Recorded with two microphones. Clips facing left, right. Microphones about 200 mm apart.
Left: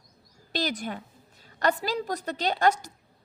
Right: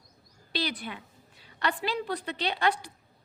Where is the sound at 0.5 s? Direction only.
45° left (ahead or behind).